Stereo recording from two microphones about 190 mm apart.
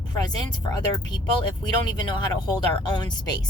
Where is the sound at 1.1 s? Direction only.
25° left (ahead or behind).